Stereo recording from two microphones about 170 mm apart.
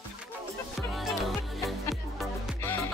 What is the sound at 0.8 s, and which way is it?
Music, centre (ahead or behind).